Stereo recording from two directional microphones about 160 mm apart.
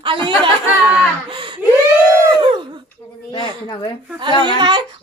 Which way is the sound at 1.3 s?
30° right (ahead or behind).